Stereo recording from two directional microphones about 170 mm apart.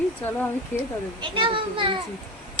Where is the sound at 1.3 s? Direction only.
30° right (ahead or behind).